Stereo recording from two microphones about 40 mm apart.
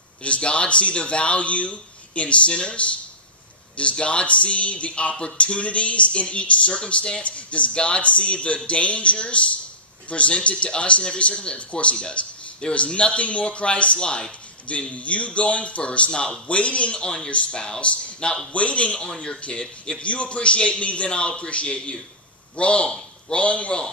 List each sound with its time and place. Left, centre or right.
0.2 s speech: left